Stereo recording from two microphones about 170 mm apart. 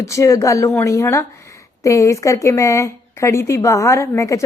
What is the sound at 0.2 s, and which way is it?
A woman's voice, 20° left (ahead or behind).